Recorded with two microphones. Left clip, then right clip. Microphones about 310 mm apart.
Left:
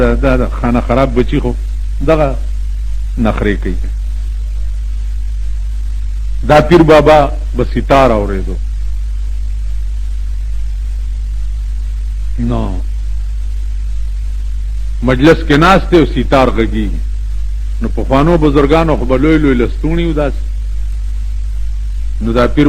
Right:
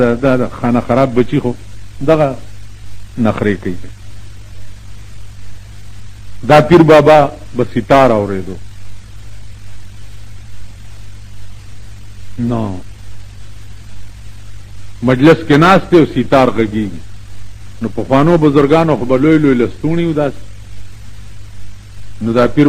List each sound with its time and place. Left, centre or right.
0.0 s a man's voice: left
6.5 s a man's voice: left
12.5 s speech: left
15.0 s a man's voice: left
22.2 s a man's voice: left